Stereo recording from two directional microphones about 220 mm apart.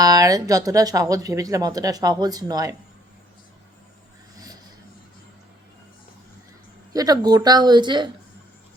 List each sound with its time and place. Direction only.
0.0 s speech: 15° right (ahead or behind)
6.9 s speech: 15° right (ahead or behind)